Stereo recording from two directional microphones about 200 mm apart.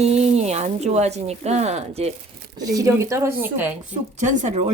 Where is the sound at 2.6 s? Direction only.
15° right (ahead or behind).